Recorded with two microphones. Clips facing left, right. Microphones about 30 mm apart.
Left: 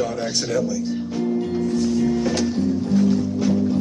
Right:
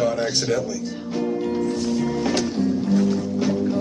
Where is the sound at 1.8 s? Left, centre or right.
Centre.